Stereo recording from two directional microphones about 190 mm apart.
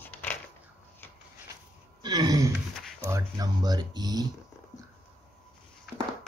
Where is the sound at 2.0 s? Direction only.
20° right (ahead or behind).